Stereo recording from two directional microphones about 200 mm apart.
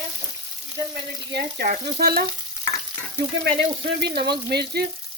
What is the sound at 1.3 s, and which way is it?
Speech, 55° right (ahead or behind).